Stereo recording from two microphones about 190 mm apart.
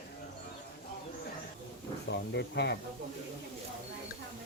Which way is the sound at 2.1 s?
60° left (ahead or behind).